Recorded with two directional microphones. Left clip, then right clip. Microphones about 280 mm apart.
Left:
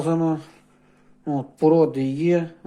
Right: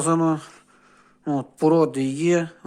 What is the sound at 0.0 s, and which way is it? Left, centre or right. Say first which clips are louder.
Speech: right 2 dB; centre.